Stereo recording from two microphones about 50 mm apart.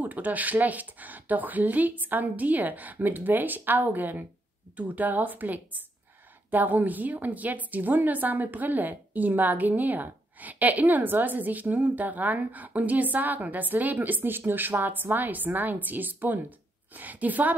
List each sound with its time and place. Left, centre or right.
0.0 s a woman's voice: right